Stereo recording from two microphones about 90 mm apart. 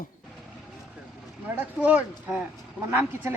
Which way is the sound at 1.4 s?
20° right (ahead or behind).